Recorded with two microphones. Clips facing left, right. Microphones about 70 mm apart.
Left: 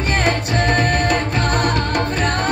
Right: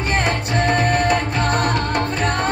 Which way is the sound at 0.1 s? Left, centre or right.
Right.